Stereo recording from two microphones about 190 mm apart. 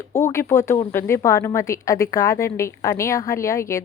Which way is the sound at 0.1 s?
15° left (ahead or behind).